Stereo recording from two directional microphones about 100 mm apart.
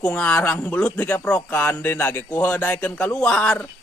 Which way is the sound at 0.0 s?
10° left (ahead or behind).